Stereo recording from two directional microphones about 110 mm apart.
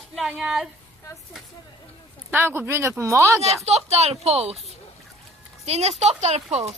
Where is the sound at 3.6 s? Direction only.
75° right (ahead or behind).